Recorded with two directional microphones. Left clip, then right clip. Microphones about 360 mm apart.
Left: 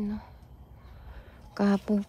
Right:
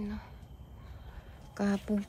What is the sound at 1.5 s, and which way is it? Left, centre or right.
Speech, left.